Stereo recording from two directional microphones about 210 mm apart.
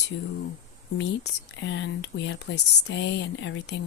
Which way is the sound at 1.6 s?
60° left (ahead or behind).